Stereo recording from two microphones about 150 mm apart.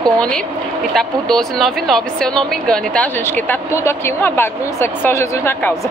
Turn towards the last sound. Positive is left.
turn(degrees=15)  # may be behind; listen again after turning